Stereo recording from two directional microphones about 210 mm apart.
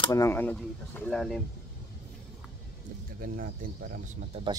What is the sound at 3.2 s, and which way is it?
Speech, 40° right (ahead or behind).